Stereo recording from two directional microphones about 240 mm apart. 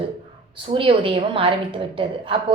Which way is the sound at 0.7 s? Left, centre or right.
Right.